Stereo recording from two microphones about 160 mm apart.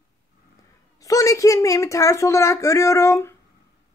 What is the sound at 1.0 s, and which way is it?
A woman's voice, 20° left (ahead or behind).